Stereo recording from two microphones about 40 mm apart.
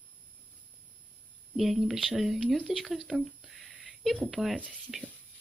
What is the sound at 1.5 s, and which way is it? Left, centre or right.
Speech, centre.